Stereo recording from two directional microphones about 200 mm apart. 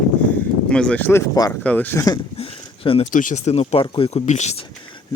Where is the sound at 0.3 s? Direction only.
5° left (ahead or behind).